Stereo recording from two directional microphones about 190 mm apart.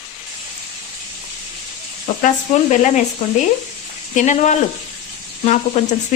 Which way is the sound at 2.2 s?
40° left (ahead or behind).